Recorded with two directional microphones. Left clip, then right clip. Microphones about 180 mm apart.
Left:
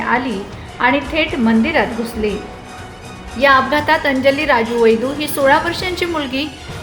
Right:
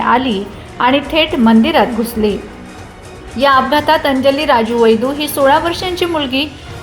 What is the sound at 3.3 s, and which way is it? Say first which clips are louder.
A woman's voice: right 2 dB; 15° right (ahead or behind).